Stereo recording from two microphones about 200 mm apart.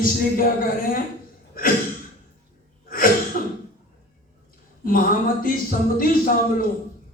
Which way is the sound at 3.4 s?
45° left (ahead or behind).